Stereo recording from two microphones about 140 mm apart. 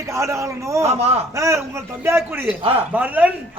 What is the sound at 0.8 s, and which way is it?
Speech, 50° right (ahead or behind).